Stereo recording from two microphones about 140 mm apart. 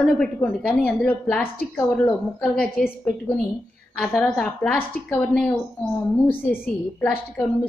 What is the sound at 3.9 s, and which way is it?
A woman's voice, 5° left (ahead or behind).